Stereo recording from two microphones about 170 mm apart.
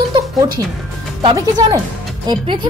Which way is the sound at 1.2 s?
25° right (ahead or behind).